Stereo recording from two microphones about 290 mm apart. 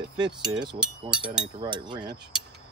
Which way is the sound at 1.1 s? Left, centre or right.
Centre.